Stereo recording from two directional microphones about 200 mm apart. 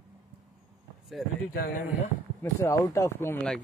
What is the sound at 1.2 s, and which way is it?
Speech, centre (ahead or behind).